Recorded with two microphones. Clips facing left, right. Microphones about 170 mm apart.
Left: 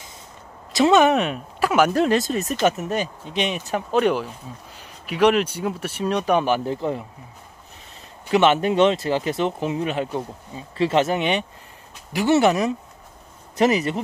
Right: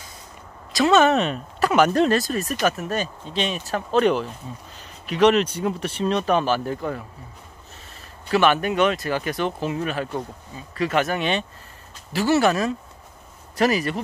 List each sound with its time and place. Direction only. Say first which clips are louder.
0.7 s speech: left 1 dB; 20° left (ahead or behind)
2.1 s speech: left 1 dB; 20° left (ahead or behind)
8.3 s speech: left 2 dB; 20° left (ahead or behind)